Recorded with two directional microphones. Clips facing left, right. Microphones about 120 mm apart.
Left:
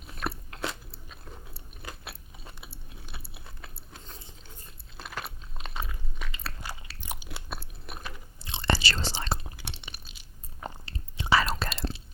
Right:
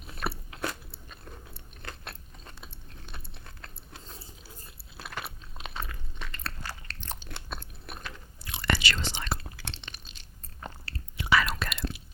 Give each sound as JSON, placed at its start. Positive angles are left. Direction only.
{"t": 0.0, "sound": "chewing", "side_deg": 0}
{"t": 8.4, "sound": "whispering", "side_deg": 25}
{"t": 9.4, "sound": "chewing", "side_deg": 15}
{"t": 10.8, "sound": "whispering", "side_deg": 25}